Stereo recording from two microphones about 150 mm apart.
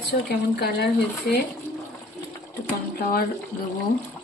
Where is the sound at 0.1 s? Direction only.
90° left.